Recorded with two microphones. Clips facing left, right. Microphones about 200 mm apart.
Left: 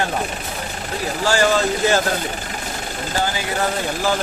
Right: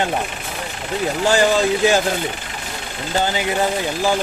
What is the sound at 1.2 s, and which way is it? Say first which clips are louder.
Speech: right 1 dB; 20° right (ahead or behind).